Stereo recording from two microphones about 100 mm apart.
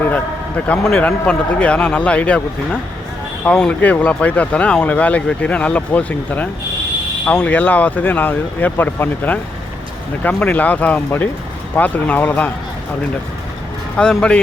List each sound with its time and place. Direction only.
0.7 s speech: 10° left (ahead or behind)
3.4 s speech: 10° left (ahead or behind)
13.9 s speech: 10° left (ahead or behind)